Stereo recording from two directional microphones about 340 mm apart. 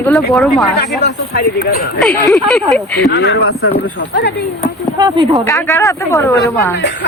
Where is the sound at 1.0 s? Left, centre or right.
Left.